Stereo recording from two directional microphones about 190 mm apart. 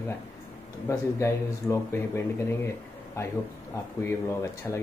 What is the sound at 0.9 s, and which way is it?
Speech, 15° left (ahead or behind).